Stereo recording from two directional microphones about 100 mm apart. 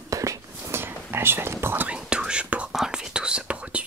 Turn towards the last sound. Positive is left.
turn(degrees=-10)  # may be behind; listen again after turning